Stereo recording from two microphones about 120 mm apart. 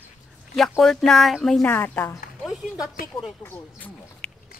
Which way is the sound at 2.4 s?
5° right (ahead or behind).